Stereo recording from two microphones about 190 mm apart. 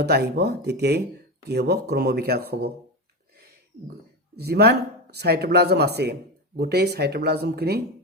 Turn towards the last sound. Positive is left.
turn(degrees=-60)  # may be behind; listen again after turning